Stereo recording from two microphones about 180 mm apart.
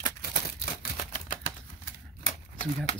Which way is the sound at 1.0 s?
45° left (ahead or behind).